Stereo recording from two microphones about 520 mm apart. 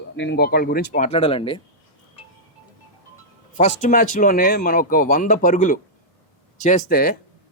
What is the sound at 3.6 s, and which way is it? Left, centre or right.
Speech, centre.